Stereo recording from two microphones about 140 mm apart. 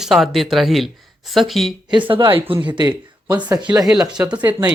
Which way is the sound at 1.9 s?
35° right (ahead or behind).